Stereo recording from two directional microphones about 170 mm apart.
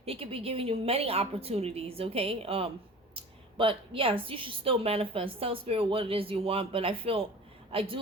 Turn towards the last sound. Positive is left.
turn(degrees=-35)  # may be behind; listen again after turning